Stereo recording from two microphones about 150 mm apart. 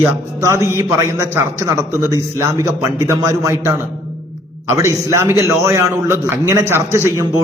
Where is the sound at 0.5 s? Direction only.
20° right (ahead or behind).